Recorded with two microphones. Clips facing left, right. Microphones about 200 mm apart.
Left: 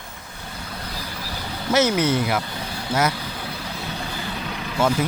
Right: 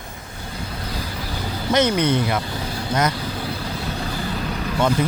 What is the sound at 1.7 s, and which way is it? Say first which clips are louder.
Speech: right 1 dB; 5° left (ahead or behind).